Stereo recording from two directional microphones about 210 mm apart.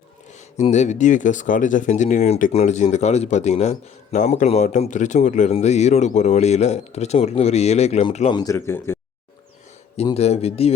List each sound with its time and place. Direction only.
0.5 s speech: 35° left (ahead or behind)
8.4 s speech: 15° left (ahead or behind)
10.0 s speech: 30° left (ahead or behind)